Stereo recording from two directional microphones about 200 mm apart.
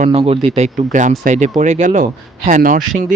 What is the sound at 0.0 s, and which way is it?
Speech, 30° right (ahead or behind).